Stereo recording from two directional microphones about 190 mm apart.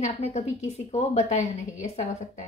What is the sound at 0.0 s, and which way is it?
A woman's voice, 35° left (ahead or behind).